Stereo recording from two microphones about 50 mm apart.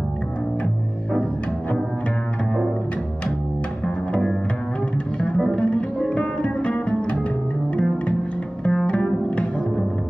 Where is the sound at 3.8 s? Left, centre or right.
Centre.